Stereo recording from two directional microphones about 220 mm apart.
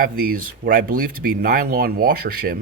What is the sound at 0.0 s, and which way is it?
A man's voice, 40° right (ahead or behind).